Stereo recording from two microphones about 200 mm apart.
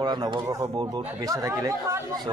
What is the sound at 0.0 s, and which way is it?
Speech, 20° right (ahead or behind).